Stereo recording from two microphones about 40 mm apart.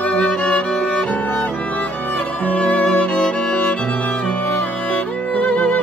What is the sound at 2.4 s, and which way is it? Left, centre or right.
Music, left.